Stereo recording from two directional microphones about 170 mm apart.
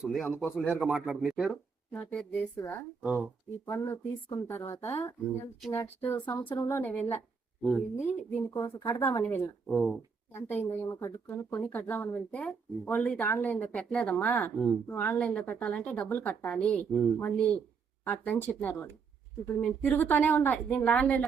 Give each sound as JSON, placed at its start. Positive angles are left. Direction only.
{"t": 0.0, "sound": "speech", "side_deg": 0}
{"t": 1.9, "sound": "speech", "side_deg": 10}
{"t": 7.6, "sound": "speech", "side_deg": 0}
{"t": 7.9, "sound": "speech", "side_deg": 10}
{"t": 9.6, "sound": "speech", "side_deg": 0}
{"t": 10.3, "sound": "speech", "side_deg": 10}